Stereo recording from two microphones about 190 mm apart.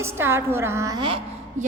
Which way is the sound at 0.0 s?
10° right (ahead or behind).